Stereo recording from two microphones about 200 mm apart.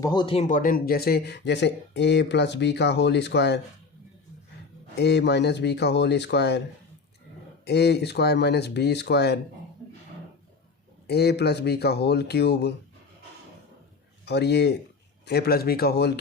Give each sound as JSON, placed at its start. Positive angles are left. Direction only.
{"t": 0.0, "sound": "speech", "side_deg": 20}
{"t": 4.9, "sound": "speech", "side_deg": 55}
{"t": 7.6, "sound": "speech", "side_deg": 55}
{"t": 11.0, "sound": "speech", "side_deg": 55}
{"t": 14.3, "sound": "speech", "side_deg": 55}